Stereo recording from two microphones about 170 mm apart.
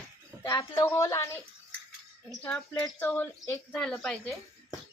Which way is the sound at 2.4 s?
5° left (ahead or behind).